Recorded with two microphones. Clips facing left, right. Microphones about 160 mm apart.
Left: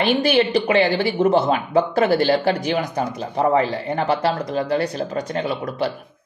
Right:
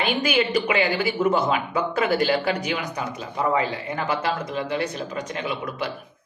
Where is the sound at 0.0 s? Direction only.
35° left (ahead or behind).